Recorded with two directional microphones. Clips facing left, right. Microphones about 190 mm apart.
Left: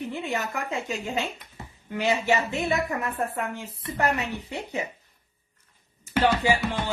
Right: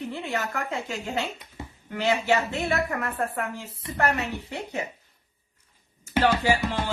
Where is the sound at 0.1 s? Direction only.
15° left (ahead or behind).